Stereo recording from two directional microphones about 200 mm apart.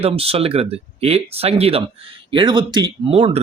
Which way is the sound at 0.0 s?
30° right (ahead or behind).